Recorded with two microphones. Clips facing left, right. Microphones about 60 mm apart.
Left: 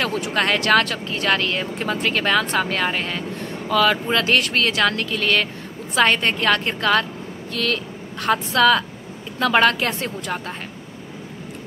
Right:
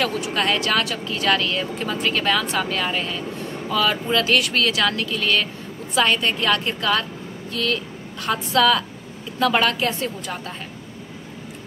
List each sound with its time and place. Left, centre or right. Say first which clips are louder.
0.0 s a woman's voice: left 1 dB; left